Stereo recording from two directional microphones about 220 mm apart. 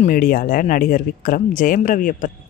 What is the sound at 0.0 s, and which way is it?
Speech, 40° left (ahead or behind).